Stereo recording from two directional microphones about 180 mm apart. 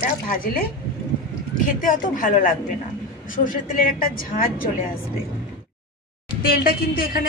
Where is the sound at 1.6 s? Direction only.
50° left (ahead or behind).